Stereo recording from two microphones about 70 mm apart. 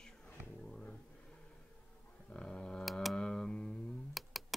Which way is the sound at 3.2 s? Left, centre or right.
Centre.